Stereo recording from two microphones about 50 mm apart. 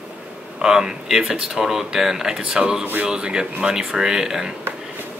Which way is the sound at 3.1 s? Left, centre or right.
Centre.